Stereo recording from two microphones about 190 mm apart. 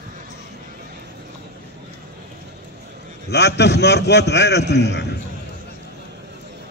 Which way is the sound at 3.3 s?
60° left (ahead or behind).